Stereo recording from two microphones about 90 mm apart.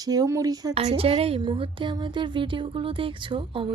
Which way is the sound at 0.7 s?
90° right.